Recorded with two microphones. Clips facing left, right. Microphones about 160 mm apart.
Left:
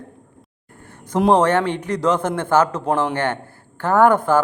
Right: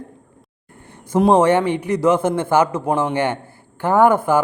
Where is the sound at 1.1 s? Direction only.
10° right (ahead or behind).